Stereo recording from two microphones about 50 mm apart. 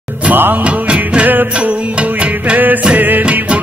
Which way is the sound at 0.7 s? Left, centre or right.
Right.